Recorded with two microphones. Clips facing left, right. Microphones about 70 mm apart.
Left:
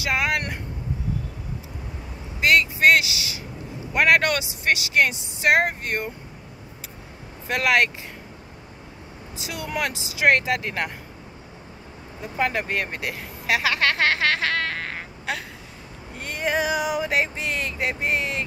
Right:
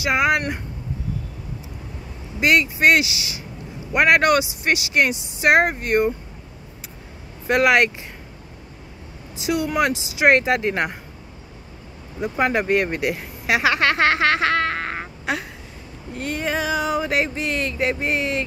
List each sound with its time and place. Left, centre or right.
0.0 s speech: centre
2.4 s speech: centre
7.4 s speech: centre
9.4 s speech: centre
10.2 s speech: right
12.4 s speech: centre
16.2 s a sound: centre